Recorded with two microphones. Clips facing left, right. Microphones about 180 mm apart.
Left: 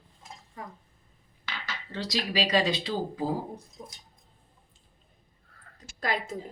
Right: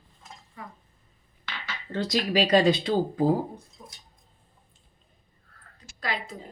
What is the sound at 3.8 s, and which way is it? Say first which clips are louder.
Dishes: left 4 dB; 30° left (ahead or behind).